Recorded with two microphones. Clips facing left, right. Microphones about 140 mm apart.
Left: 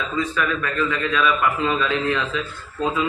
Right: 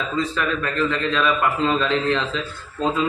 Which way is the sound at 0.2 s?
30° right (ahead or behind).